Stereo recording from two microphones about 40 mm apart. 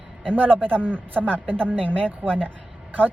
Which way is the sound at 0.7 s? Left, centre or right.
Right.